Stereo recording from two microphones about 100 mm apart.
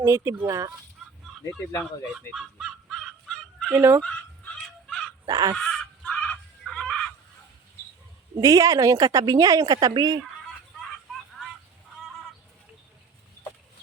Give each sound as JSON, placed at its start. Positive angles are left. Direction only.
{"t": 0.0, "sound": "speech", "side_deg": -25}
{"t": 2.3, "sound": "goose", "side_deg": 0}
{"t": 3.7, "sound": "speech", "side_deg": -25}
{"t": 4.0, "sound": "fowl", "side_deg": 10}
{"t": 5.2, "sound": "goose", "side_deg": -40}
{"t": 5.5, "sound": "fowl", "side_deg": 5}
{"t": 8.4, "sound": "speech", "side_deg": -35}
{"t": 10.4, "sound": "a sound", "side_deg": 0}